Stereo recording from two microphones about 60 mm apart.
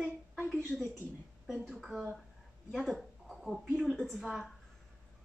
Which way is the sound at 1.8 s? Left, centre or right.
Centre.